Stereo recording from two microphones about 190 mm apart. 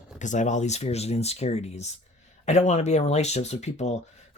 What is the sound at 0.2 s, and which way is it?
Speech, 40° left (ahead or behind).